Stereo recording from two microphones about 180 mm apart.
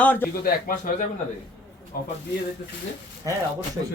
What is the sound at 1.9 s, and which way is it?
Speech, 55° left (ahead or behind).